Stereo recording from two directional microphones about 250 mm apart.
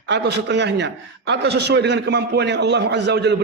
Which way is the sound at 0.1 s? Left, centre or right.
Right.